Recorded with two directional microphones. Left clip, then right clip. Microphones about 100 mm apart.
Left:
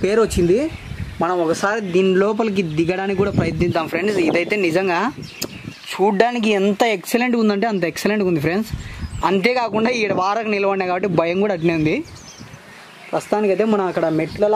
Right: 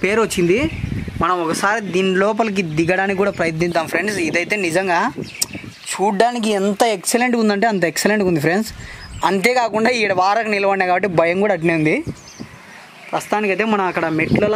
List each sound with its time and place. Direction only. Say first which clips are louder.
0.0 s speech: even; 45° right (ahead or behind)
6.0 s speech: even; 20° right (ahead or behind)
13.1 s speech: even; 40° right (ahead or behind)